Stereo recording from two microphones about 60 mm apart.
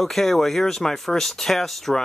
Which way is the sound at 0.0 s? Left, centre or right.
Centre.